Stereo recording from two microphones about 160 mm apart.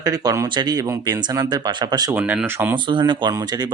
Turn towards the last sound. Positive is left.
turn(degrees=-30)  # may be behind; listen again after turning